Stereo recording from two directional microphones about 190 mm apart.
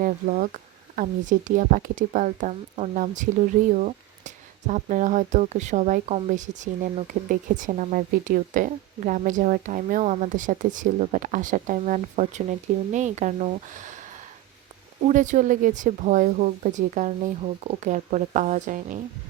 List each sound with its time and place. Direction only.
0.0 s speech: 45° right (ahead or behind)
15.0 s speech: 40° right (ahead or behind)